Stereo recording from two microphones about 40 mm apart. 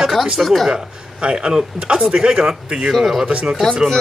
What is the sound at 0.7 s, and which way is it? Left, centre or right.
Speech, right.